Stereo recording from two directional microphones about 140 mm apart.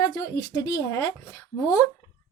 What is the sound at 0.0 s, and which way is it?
A woman's voice, 25° left (ahead or behind).